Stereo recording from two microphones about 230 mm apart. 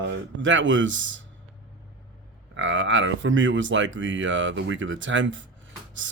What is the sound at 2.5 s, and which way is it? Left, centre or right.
Speech, right.